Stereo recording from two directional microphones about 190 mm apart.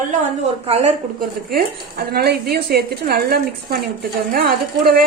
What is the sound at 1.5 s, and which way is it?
A woman's voice, 55° right (ahead or behind).